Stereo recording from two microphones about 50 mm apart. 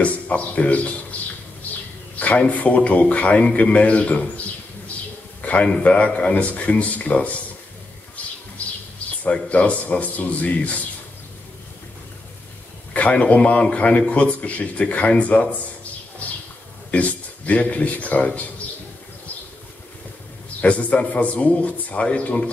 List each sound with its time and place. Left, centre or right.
0.0 s speech: left
2.1 s a sound: left
2.5 s a man's voice: left
5.4 s a sound: left
5.8 s a man's voice: left
8.2 s bee: left
9.2 s a man's voice: left
12.9 s a man's voice: left
17.5 s a man's voice: left
20.6 s a man's voice: left